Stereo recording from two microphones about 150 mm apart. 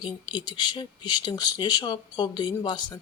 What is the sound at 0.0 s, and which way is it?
Speech, 30° left (ahead or behind).